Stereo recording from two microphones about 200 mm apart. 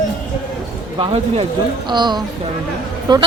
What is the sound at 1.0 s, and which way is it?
A woman's voice, 25° right (ahead or behind).